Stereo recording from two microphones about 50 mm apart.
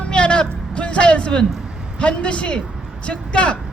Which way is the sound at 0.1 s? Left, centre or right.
Centre.